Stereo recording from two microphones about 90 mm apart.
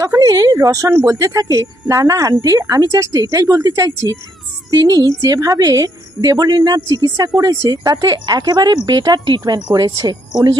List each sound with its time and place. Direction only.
0.2 s a woman's voice: 45° right (ahead or behind)